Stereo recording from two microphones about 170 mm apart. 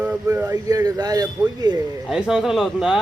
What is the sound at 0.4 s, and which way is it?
Speech, 20° right (ahead or behind).